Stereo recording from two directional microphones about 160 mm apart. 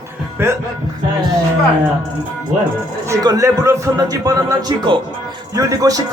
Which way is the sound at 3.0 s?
20° right (ahead or behind).